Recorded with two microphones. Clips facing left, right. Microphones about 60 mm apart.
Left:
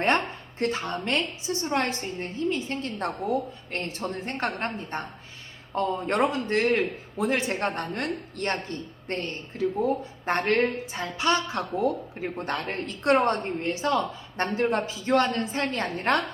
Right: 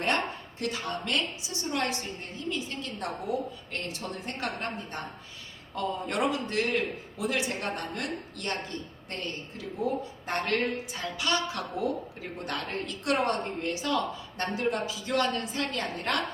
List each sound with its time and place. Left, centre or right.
0.6 s a woman's voice: left